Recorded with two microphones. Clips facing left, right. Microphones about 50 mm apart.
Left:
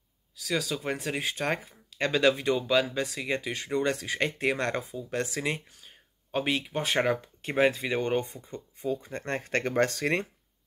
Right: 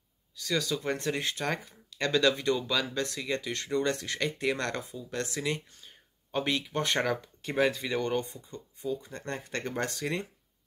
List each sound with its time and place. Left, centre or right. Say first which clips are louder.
0.4 s speech: even; centre
4.2 s speech: left 3 dB; left
5.7 s speech: left 1 dB; centre
7.4 s speech: left 3 dB; left
9.4 s speech: left 8 dB; left